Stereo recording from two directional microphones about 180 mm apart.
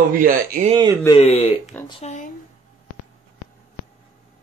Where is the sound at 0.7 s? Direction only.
25° right (ahead or behind).